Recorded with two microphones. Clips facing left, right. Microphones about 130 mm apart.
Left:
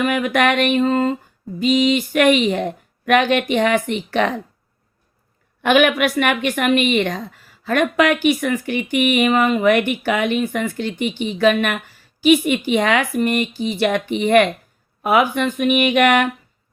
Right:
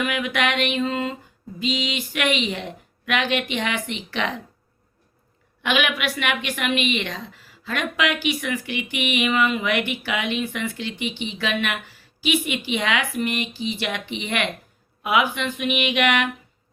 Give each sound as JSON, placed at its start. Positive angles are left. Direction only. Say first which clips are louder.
{"t": 0.0, "sound": "a woman's voice", "louder": "left 6 dB", "side_deg": 45}
{"t": 5.6, "sound": "a woman's voice", "louder": "left 8 dB", "side_deg": 50}